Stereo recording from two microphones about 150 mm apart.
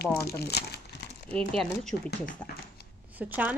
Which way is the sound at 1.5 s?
5° left (ahead or behind).